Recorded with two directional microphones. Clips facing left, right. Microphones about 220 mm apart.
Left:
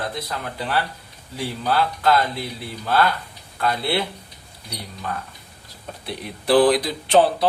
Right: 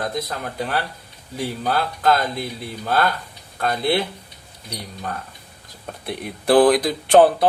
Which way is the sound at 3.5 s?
45° right (ahead or behind).